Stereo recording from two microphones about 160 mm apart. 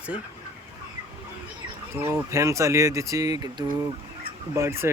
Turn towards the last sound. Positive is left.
turn(degrees=-15)  # may be behind; listen again after turning